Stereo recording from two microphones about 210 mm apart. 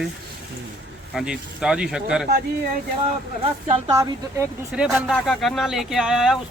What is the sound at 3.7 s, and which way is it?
A woman's voice, 20° right (ahead or behind).